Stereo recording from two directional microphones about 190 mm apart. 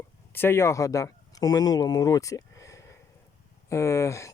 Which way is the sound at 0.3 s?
10° left (ahead or behind).